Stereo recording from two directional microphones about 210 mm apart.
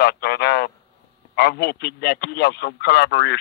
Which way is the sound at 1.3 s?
50° left (ahead or behind).